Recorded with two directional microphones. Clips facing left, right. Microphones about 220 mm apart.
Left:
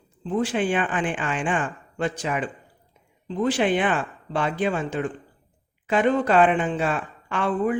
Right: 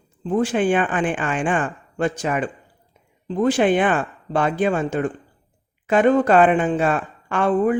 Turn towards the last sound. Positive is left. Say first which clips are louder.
# right 5 dB
turn(degrees=-50)  # may be behind; listen again after turning